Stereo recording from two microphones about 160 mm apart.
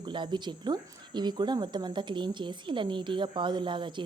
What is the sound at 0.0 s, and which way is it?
Speech, 30° right (ahead or behind).